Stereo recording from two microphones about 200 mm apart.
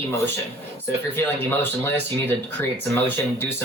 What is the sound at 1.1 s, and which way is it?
Speech, 10° left (ahead or behind).